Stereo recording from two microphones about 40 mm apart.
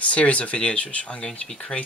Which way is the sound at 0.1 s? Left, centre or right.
Left.